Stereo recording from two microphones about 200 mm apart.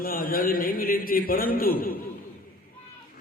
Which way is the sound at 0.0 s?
45° left (ahead or behind).